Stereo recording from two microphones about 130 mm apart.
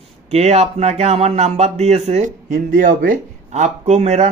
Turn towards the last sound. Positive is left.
turn(degrees=-60)  # may be behind; listen again after turning